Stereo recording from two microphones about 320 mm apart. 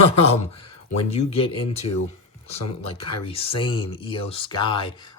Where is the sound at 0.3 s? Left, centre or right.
Centre.